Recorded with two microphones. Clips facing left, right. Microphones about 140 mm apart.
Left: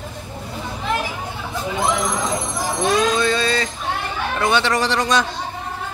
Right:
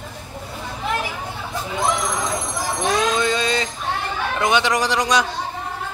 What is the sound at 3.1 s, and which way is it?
Male singing, 20° right (ahead or behind).